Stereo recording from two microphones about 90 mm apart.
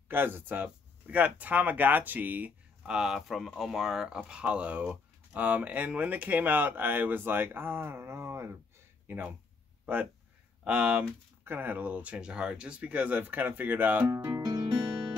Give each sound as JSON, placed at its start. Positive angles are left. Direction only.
{"t": 0.1, "sound": "speech", "side_deg": -25}
{"t": 2.8, "sound": "speech", "side_deg": -5}
{"t": 10.6, "sound": "speech", "side_deg": -10}
{"t": 14.0, "sound": "speech", "side_deg": -40}
{"t": 14.4, "sound": "guitar", "side_deg": -50}